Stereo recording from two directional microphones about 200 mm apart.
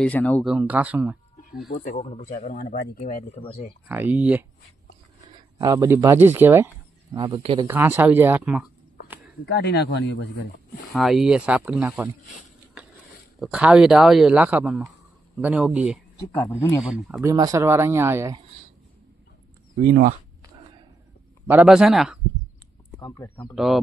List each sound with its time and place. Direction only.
0.0 s speech: 5° left (ahead or behind)
1.7 s speech: 30° left (ahead or behind)
3.9 s speech: 10° right (ahead or behind)
5.2 s speech: 20° right (ahead or behind)
7.2 s speech: 25° right (ahead or behind)
7.6 s speech: 10° right (ahead or behind)
9.5 s speech: 55° left (ahead or behind)
10.9 s speech: centre (ahead or behind)
13.4 s speech: 5° right (ahead or behind)
17.3 s speech: 15° right (ahead or behind)
19.9 s speech: 45° right (ahead or behind)
21.5 s speech: 5° right (ahead or behind)
22.9 s speech: 20° left (ahead or behind)
23.5 s speech: centre (ahead or behind)